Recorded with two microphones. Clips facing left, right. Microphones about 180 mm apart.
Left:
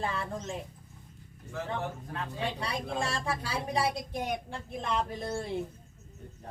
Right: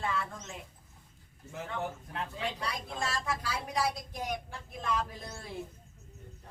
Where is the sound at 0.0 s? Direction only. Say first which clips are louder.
Left 2 dB; 35° left (ahead or behind).